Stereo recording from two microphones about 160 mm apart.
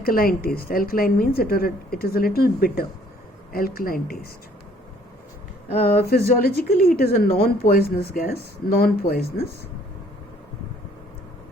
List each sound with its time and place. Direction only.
0.0 s a woman's voice: 65° left (ahead or behind)
6.0 s a woman's voice: 75° left (ahead or behind)